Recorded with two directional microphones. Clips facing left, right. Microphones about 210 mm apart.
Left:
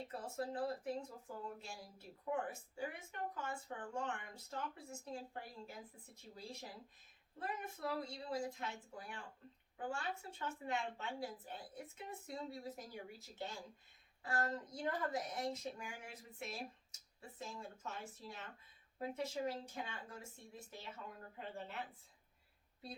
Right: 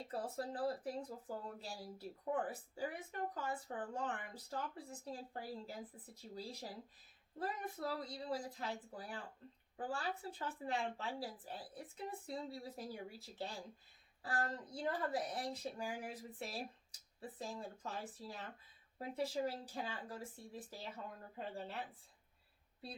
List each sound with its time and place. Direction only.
0.1 s speech: 35° right (ahead or behind)